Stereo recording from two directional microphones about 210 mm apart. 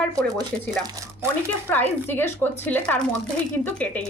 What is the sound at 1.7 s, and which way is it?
A woman's voice, 10° left (ahead or behind).